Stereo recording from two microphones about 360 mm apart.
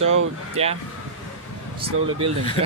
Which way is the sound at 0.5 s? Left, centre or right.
Centre.